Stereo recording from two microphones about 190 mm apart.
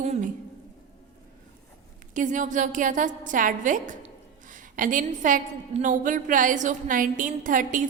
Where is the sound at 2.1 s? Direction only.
45° right (ahead or behind).